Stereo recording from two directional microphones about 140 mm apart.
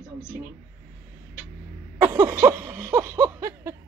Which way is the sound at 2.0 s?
20° right (ahead or behind).